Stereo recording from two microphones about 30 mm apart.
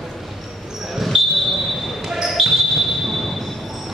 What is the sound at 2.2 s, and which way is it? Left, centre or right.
Basketball bounce, centre.